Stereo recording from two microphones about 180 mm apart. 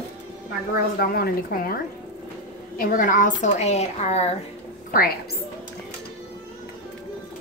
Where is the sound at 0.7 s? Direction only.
55° left (ahead or behind); by 4.3 s 35° left (ahead or behind).